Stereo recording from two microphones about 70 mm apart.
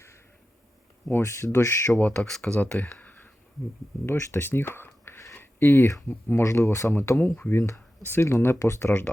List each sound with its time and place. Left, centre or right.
1.1 s speech: left
2.1 s speech: centre
2.6 s computer keyboard: centre
4.0 s speech: left
7.2 s speech: left